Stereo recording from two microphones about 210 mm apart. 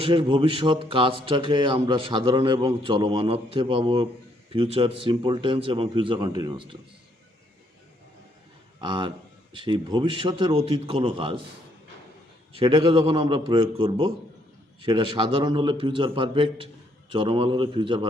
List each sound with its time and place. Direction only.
0.0 s speech: 25° right (ahead or behind)
8.8 s speech: 20° right (ahead or behind)
12.5 s speech: 25° right (ahead or behind)